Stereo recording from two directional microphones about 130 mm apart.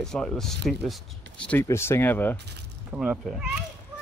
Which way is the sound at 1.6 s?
20° left (ahead or behind).